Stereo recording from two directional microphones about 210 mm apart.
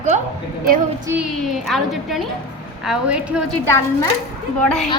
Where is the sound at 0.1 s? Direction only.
35° right (ahead or behind).